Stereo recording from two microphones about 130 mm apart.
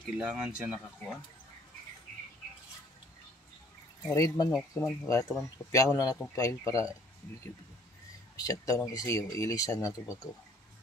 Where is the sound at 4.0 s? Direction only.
25° left (ahead or behind).